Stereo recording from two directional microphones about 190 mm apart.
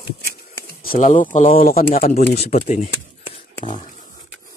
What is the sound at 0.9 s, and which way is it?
Speech, 40° left (ahead or behind).